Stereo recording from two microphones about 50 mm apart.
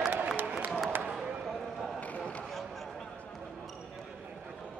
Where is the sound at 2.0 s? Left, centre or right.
Left.